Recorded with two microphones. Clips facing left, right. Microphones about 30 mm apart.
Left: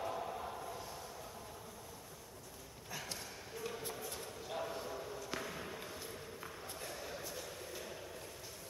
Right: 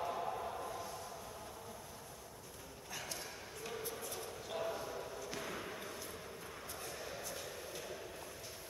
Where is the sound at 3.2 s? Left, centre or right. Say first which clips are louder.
Left 1 dB; centre.